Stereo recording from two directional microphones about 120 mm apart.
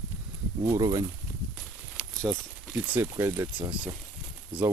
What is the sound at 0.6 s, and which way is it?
Speech, 30° right (ahead or behind).